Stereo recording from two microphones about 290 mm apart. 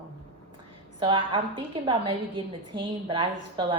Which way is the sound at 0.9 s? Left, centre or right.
Centre.